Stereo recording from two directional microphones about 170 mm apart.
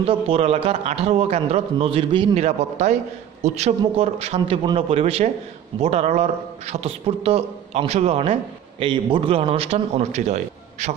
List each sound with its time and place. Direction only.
0.0 s a man's voice: 35° right (ahead or behind)